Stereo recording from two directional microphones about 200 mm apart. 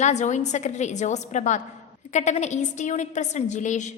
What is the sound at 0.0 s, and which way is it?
A woman's voice, 35° left (ahead or behind).